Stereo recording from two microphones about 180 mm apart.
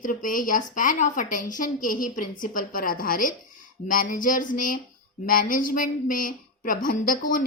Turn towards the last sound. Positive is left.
turn(degrees=50)  # may be behind; listen again after turning